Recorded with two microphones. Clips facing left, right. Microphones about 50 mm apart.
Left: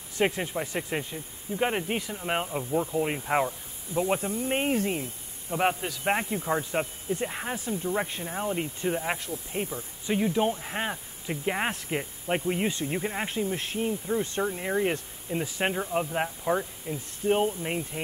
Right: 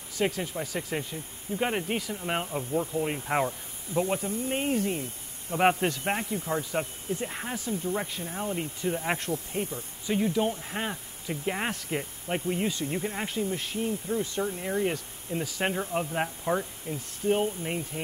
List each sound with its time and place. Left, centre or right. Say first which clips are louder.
0.2 s speech: left 2 dB; left
1.1 s speech: even; centre
4.2 s speech: left 2 dB; left
5.6 s speech: right 3 dB; centre
6.4 s speech: left 2 dB; left
7.2 s speech: left 2 dB; centre
7.5 s speech: even; left
9.3 s speech: right 4 dB; right
10.0 s speech: left 1 dB; centre
15.6 s speech: left 1 dB; centre
17.3 s speech: left 1 dB; centre